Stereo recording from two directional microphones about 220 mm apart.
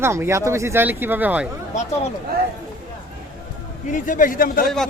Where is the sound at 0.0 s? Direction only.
10° right (ahead or behind).